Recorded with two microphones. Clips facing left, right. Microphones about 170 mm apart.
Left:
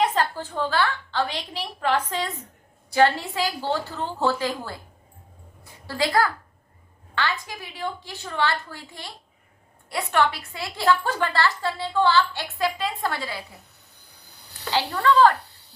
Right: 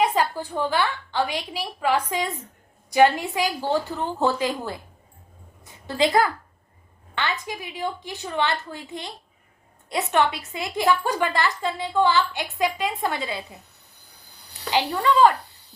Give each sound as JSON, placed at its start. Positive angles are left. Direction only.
{"t": 0.0, "sound": "a woman's voice", "side_deg": -10}
{"t": 5.8, "sound": "a woman's voice", "side_deg": -20}
{"t": 14.7, "sound": "a woman's voice", "side_deg": -15}